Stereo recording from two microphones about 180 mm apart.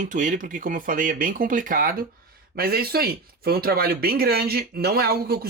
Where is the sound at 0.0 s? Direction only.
45° right (ahead or behind).